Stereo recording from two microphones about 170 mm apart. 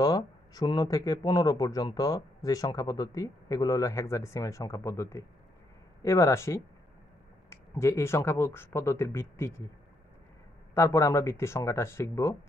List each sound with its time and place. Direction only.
0.0 s speech: 20° left (ahead or behind)
10.7 s speech: 15° left (ahead or behind)